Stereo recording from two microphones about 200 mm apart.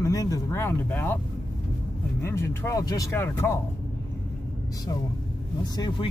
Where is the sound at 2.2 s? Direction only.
10° left (ahead or behind).